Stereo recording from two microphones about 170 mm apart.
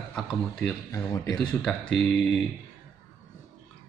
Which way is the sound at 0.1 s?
Centre (ahead or behind).